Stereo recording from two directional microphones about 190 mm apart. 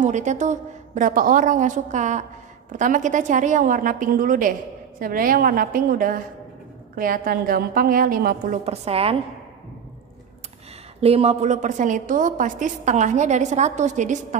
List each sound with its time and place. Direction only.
0.0 s a woman's voice: 40° right (ahead or behind)
8.6 s a woman's voice: 30° right (ahead or behind)
11.0 s a woman's voice: 30° right (ahead or behind)